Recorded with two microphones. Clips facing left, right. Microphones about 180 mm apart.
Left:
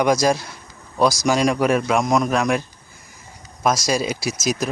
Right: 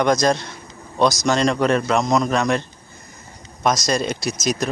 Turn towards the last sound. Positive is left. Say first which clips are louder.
# even
turn(degrees=5)  # may be behind; listen again after turning